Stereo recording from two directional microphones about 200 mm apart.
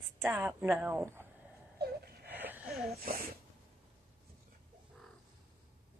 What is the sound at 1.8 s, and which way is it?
Wail, 50° right (ahead or behind).